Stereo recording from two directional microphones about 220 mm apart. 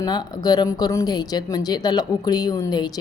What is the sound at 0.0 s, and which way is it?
Speech, 20° left (ahead or behind).